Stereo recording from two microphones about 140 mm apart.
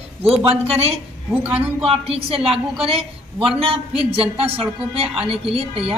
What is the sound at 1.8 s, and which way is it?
A woman's voice, 45° right (ahead or behind).